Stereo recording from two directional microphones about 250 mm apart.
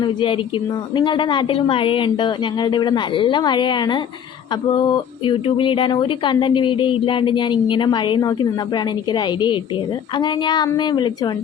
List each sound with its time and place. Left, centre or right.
0.0 s speech: centre
5.2 s speech: centre